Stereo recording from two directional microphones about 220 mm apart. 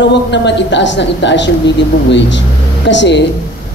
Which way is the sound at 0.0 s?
55° left (ahead or behind).